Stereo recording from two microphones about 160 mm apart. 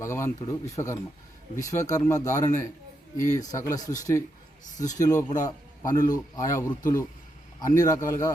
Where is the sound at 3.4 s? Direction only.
20° left (ahead or behind).